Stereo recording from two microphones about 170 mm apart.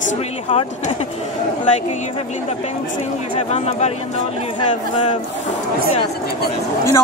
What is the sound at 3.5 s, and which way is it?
Speech, 40° left (ahead or behind).